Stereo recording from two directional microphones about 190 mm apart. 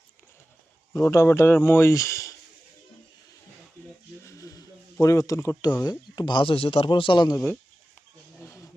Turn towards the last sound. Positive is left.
turn(degrees=25)  # may be behind; listen again after turning